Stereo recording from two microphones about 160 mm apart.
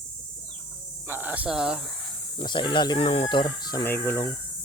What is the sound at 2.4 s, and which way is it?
Speech, 30° left (ahead or behind).